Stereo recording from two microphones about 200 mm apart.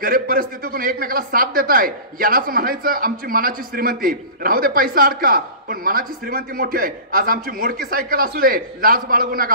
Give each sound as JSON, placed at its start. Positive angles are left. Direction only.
{"t": 0.0, "sound": "speech", "side_deg": -45}